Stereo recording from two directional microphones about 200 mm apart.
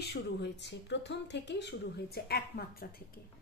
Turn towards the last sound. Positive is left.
turn(degrees=50)  # may be behind; listen again after turning